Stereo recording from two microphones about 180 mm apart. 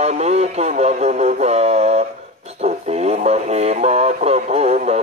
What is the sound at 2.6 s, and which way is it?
Music, 35° right (ahead or behind).